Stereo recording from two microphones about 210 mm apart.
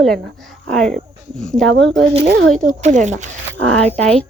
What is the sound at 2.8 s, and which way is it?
Speech, 35° right (ahead or behind).